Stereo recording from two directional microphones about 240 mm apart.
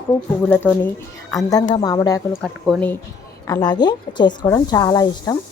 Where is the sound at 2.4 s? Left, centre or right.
Centre.